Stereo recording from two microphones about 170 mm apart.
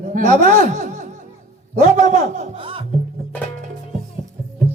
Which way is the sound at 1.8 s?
45° right (ahead or behind).